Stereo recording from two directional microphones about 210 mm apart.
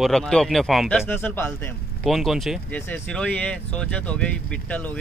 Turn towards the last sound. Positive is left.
turn(degrees=5)  # may be behind; listen again after turning